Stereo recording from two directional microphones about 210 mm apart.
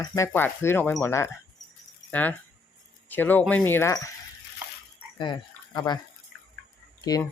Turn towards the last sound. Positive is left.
turn(degrees=20)  # may be behind; listen again after turning